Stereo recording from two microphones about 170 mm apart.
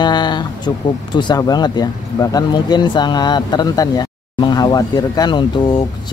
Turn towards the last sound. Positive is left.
turn(degrees=25)  # may be behind; listen again after turning